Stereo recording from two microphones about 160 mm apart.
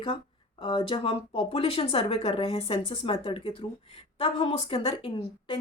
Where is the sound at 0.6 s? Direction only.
30° left (ahead or behind).